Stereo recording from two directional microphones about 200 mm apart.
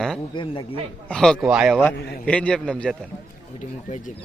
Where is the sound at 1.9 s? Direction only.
55° left (ahead or behind).